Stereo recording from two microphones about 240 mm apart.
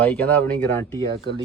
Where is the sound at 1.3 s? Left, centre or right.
Right.